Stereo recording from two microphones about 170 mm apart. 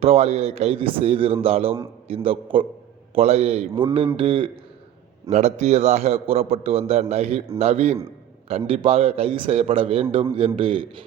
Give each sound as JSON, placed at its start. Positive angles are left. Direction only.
{"t": 0.0, "sound": "a man's voice", "side_deg": -40}